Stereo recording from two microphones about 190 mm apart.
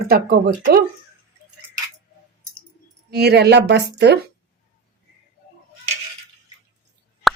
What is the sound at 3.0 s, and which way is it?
A woman's voice, 60° right (ahead or behind).